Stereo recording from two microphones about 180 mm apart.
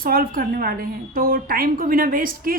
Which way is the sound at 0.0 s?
55° right (ahead or behind).